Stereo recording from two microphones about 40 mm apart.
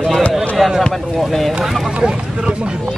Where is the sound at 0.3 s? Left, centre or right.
Centre.